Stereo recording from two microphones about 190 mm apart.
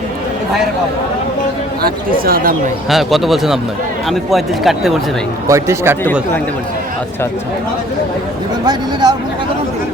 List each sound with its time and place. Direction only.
1.8 s speech: 50° right (ahead or behind)
2.9 s speech: centre (ahead or behind)
5.5 s speech: 15° right (ahead or behind)
8.6 s speech: 20° right (ahead or behind)